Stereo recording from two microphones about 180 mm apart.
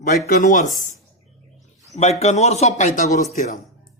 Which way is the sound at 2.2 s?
40° left (ahead or behind).